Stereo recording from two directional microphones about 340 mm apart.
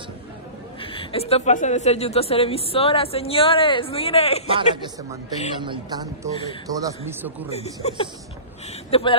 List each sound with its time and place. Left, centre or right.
0.7 s a woman's voice: centre
4.5 s a man's voice: centre
7.4 s a woman's voice: centre